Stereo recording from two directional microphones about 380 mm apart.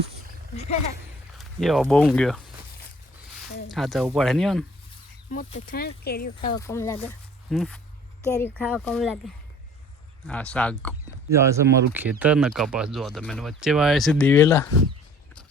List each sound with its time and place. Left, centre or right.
1.4 s speech: centre
3.7 s speech: centre
5.3 s speech: centre
6.5 s speech: centre
10.2 s speech: centre
11.3 s speech: centre